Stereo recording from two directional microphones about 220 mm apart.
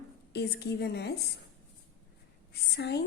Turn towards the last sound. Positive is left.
turn(degrees=50)  # may be behind; listen again after turning